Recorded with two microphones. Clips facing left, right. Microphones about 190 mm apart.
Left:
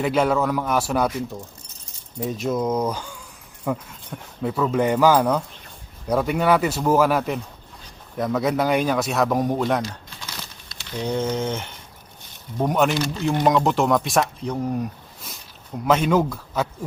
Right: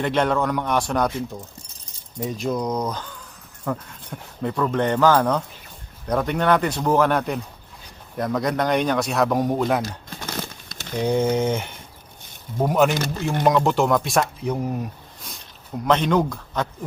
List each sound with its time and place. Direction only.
0.0 s speech: 5° left (ahead or behind)
2.1 s speech: centre (ahead or behind)
10.1 s a sound: 50° right (ahead or behind)
11.0 s speech: 10° right (ahead or behind)
12.9 s speech: 50° right (ahead or behind)
13.4 s speech: centre (ahead or behind)
15.9 s speech: 5° left (ahead or behind)